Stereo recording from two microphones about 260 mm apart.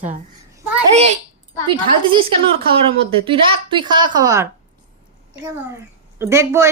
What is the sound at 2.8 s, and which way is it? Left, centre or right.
A woman's voice, centre.